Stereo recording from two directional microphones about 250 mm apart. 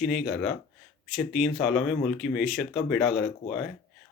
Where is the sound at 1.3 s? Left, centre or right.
Centre.